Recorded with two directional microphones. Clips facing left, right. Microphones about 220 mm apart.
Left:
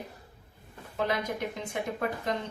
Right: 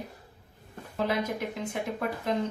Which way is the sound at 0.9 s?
5° right (ahead or behind).